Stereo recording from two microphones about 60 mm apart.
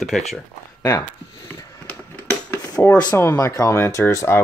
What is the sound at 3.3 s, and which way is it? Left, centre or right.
Speech, left.